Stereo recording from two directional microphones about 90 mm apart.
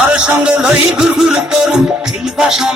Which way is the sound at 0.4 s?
5° right (ahead or behind).